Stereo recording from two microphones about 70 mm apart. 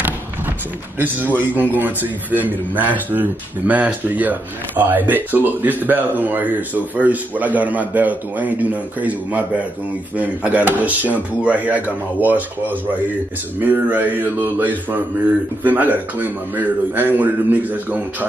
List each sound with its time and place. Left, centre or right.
0.9 s speech: right